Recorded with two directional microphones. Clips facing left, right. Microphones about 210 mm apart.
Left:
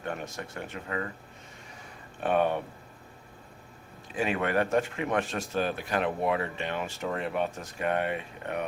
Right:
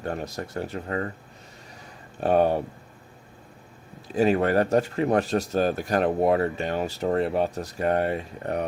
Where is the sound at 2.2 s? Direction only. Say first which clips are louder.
Right 5 dB; 35° right (ahead or behind).